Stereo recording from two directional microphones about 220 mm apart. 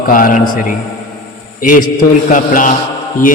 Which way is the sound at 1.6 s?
35° left (ahead or behind).